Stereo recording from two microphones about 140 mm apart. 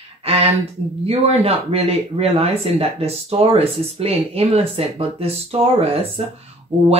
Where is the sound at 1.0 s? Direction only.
45° right (ahead or behind).